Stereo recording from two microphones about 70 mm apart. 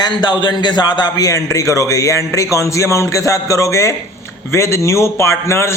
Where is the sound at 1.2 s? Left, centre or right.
Left.